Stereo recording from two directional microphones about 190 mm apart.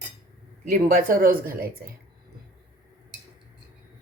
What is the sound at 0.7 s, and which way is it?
Speech, 50° right (ahead or behind).